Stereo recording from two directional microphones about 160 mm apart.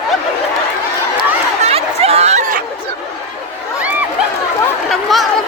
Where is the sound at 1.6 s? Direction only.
40° right (ahead or behind).